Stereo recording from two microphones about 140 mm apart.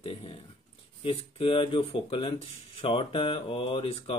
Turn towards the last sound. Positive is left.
turn(degrees=40)  # may be behind; listen again after turning